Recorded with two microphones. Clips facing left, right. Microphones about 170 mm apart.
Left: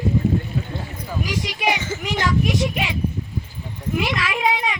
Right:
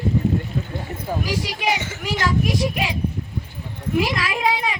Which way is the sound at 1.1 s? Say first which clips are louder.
Right 2 dB; 35° right (ahead or behind).